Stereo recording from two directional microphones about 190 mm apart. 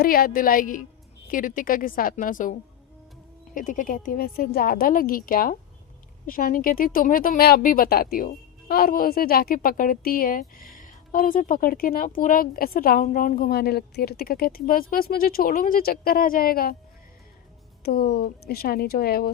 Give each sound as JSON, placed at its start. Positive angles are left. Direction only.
{"t": 0.0, "sound": "speech", "side_deg": 50}
{"t": 17.8, "sound": "speech", "side_deg": 55}